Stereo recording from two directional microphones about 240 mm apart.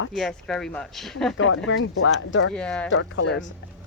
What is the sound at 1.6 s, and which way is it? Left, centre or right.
Speech, left.